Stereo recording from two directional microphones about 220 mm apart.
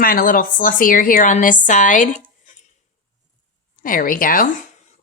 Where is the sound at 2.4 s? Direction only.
35° left (ahead or behind).